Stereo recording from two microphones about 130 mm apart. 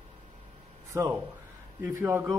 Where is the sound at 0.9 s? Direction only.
25° right (ahead or behind).